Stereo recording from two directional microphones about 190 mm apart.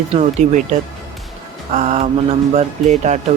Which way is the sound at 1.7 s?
35° right (ahead or behind).